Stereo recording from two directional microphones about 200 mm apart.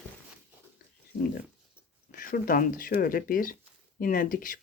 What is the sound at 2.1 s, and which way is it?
Speech, 45° left (ahead or behind).